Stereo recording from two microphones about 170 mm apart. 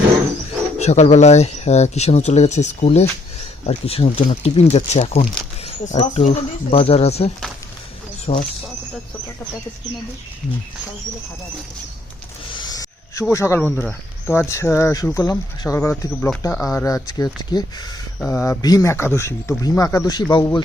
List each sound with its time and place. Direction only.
0.8 s speech: 40° left (ahead or behind)
12.5 s a sound: 20° left (ahead or behind)
13.3 s speech: 15° left (ahead or behind)
18.2 s speech: 15° left (ahead or behind)